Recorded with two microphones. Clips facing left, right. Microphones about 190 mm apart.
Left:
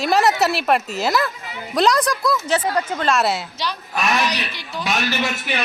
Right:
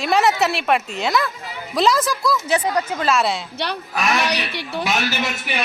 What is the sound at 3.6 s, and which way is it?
A man's voice, 60° right (ahead or behind).